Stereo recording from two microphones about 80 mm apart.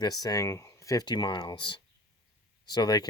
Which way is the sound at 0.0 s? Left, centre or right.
Left.